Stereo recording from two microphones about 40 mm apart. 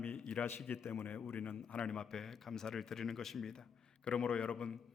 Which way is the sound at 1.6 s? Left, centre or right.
Left.